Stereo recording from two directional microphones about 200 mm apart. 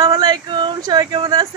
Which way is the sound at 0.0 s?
20° right (ahead or behind).